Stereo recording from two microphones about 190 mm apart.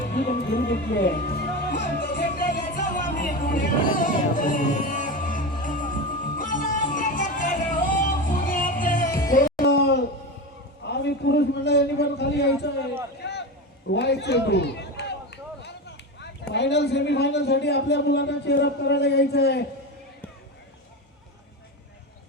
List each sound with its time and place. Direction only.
0.0 s speech: 45° left (ahead or behind)
2.0 s music: 45° left (ahead or behind)
9.6 s a sound: 60° left (ahead or behind)
16.2 s a man's voice: 65° left (ahead or behind)